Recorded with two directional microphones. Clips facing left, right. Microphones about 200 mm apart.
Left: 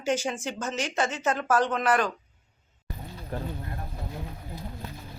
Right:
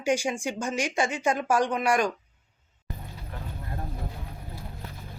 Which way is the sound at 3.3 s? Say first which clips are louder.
Left 9 dB; 40° left (ahead or behind).